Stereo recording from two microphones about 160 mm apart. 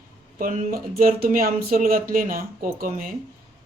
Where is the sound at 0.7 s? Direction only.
65° right (ahead or behind).